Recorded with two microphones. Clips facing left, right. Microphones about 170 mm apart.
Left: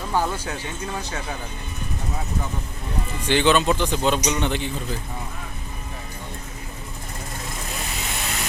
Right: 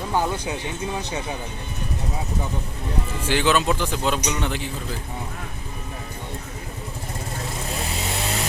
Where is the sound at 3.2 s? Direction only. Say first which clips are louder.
Left 2 dB; 5° right (ahead or behind).